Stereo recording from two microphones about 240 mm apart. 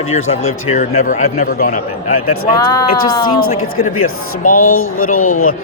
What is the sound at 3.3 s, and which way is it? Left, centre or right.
Speech, left.